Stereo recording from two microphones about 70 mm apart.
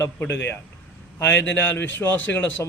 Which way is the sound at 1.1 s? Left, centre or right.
Left.